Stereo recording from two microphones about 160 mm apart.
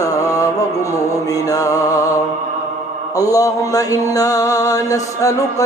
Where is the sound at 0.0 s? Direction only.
20° left (ahead or behind).